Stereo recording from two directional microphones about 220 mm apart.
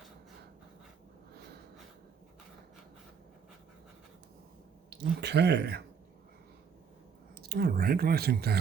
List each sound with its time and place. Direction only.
4.9 s speech: 50° right (ahead or behind)
7.4 s speech: 45° right (ahead or behind)